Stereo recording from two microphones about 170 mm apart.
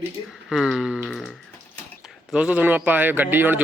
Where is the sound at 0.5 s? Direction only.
Centre (ahead or behind).